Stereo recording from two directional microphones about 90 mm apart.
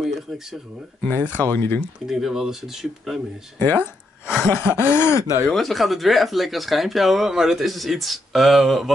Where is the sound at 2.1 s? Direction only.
5° right (ahead or behind).